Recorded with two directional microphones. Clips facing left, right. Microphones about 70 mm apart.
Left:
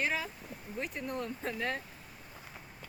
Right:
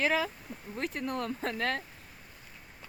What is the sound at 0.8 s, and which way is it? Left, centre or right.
Speech, right.